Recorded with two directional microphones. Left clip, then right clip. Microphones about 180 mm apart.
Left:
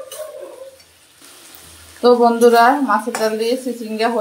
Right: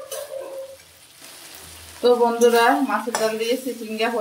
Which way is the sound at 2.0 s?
25° left (ahead or behind).